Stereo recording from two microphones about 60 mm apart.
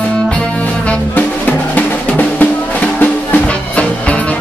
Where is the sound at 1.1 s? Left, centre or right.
Left.